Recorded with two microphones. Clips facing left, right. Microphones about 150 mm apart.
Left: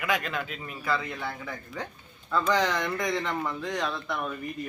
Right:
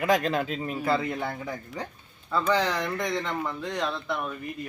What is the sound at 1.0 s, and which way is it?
Speech, 45° right (ahead or behind).